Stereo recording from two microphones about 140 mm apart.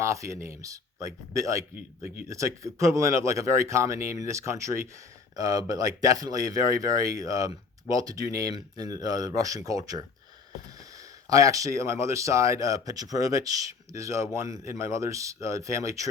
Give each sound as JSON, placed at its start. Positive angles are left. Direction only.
{"t": 0.0, "sound": "speech", "side_deg": -20}
{"t": 11.3, "sound": "speech", "side_deg": -25}